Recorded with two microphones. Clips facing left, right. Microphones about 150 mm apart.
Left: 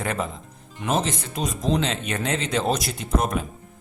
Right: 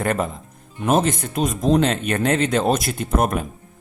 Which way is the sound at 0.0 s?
50° right (ahead or behind).